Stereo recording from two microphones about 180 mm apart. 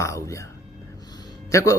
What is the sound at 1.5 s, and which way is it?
Speech, 15° left (ahead or behind).